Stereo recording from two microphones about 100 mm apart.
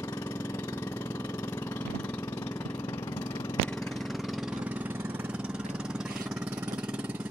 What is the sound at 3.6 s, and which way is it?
Engine, 5° left (ahead or behind).